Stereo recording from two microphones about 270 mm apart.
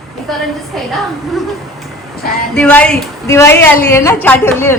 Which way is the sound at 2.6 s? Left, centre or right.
Centre.